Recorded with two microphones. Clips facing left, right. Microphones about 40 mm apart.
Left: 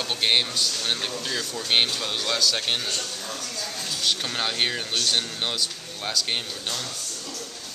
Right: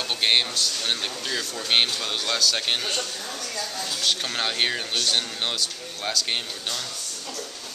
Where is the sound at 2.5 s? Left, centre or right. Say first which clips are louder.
Right 1 dB; centre.